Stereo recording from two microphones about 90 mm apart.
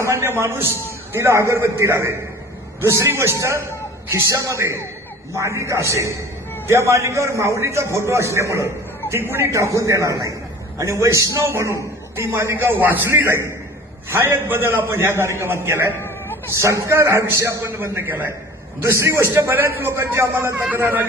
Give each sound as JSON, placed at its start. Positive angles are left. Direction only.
{"t": 0.0, "sound": "a man's voice", "side_deg": -30}
{"t": 16.0, "sound": "a sound", "side_deg": 30}
{"t": 16.6, "sound": "a man's voice", "side_deg": -35}